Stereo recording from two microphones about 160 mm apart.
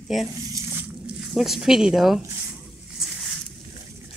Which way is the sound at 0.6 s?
15° right (ahead or behind).